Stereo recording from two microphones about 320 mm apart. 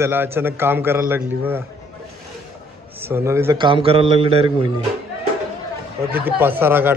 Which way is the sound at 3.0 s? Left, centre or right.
Centre.